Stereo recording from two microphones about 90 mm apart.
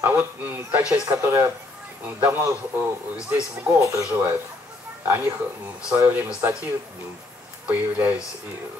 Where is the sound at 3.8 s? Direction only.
35° right (ahead or behind).